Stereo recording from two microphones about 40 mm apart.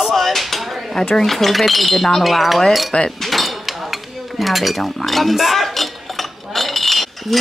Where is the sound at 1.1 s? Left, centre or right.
Centre.